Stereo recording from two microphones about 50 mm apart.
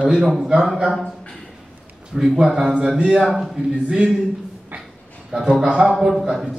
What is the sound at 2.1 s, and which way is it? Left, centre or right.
A man's voice, centre.